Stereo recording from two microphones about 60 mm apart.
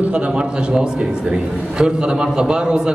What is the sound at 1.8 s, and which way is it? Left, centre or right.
Speech, centre.